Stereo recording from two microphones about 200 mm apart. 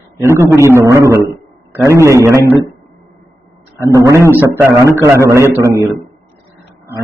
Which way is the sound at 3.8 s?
15° right (ahead or behind).